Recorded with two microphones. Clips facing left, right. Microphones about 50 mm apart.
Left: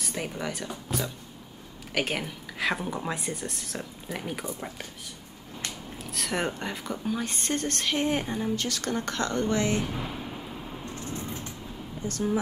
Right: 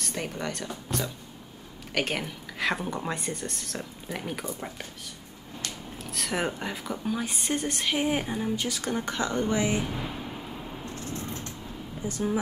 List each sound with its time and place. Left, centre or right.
0.0 s speech: centre
6.0 s a woman's voice: centre
9.8 s a sound: centre
11.2 s vehicle: centre
12.0 s speech: centre